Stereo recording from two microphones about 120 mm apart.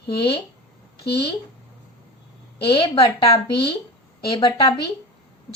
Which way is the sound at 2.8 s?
40° left (ahead or behind).